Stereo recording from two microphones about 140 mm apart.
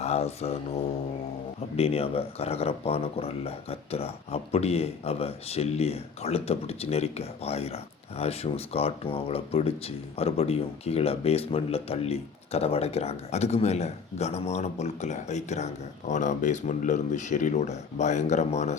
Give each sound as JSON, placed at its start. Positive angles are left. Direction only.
{"t": 0.0, "sound": "mantra", "side_deg": 50}
{"t": 1.7, "sound": "speech", "side_deg": 45}